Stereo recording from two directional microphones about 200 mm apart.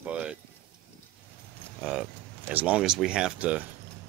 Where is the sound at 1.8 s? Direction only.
5° right (ahead or behind).